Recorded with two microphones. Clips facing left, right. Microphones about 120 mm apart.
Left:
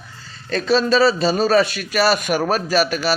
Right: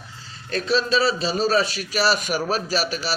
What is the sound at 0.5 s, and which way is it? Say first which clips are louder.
A man's voice: left 5 dB; 75° left (ahead or behind).